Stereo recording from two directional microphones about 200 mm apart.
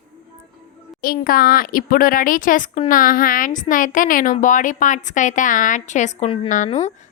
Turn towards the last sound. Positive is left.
turn(degrees=35)  # may be behind; listen again after turning